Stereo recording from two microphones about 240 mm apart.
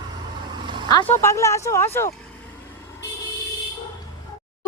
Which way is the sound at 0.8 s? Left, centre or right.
Centre.